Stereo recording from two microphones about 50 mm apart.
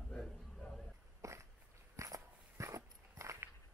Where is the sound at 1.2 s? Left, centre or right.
Right.